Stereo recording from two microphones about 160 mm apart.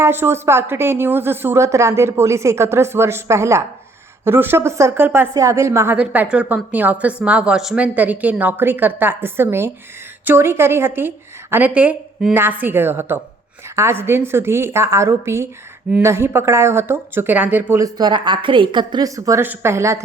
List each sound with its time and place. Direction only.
0.0 s a woman's voice: 15° right (ahead or behind)